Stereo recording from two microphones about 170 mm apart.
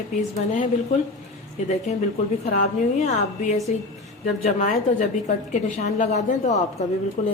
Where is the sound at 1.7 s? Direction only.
40° left (ahead or behind).